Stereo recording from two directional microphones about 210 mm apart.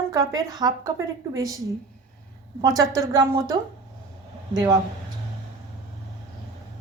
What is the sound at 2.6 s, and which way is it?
Speech, 15° right (ahead or behind).